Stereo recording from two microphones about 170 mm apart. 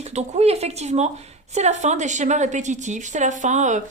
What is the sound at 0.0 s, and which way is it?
Speech, 40° right (ahead or behind).